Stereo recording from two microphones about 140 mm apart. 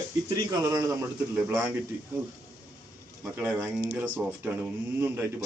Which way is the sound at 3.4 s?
15° right (ahead or behind).